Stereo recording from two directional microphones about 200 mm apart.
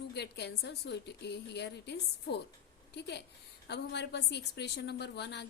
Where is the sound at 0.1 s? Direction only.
55° left (ahead or behind).